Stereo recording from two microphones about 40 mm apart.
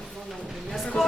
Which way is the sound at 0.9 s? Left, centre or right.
Left.